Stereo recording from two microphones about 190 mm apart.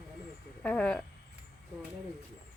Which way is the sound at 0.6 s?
5° left (ahead or behind).